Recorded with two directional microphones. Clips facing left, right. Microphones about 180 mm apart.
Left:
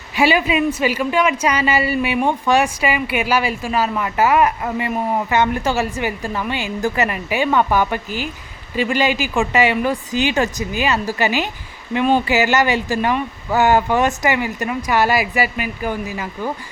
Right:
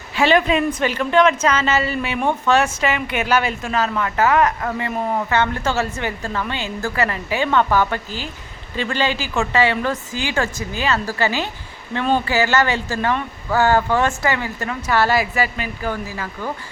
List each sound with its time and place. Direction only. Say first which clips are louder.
0.2 s a woman's voice: even; 10° left (ahead or behind)